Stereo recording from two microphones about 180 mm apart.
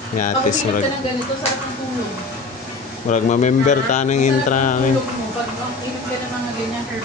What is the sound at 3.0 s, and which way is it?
Speech, 45° left (ahead or behind).